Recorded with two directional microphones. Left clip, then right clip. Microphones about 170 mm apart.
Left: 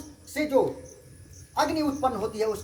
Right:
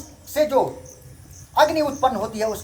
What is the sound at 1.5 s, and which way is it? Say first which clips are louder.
Speech: right 8 dB; 10° left (ahead or behind).